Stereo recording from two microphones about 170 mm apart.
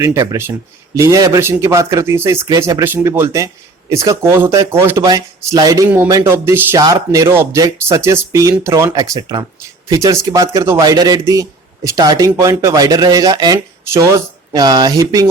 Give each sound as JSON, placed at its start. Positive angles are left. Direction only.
{"t": 0.0, "sound": "speech", "side_deg": -20}